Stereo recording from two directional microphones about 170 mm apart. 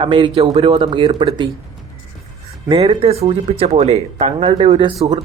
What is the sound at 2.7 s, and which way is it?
Speech, 35° right (ahead or behind).